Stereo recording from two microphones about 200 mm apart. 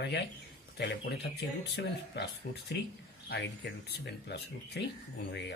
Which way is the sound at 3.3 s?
55° left (ahead or behind).